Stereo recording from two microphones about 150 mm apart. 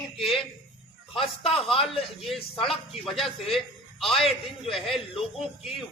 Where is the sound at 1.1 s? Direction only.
40° left (ahead or behind).